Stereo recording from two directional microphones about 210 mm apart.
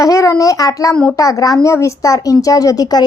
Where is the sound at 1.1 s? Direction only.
15° left (ahead or behind).